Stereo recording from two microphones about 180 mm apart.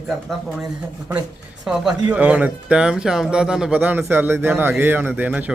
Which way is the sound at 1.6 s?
5° right (ahead or behind).